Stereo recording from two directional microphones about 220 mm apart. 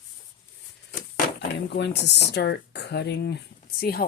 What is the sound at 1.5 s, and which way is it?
Speech, 50° left (ahead or behind).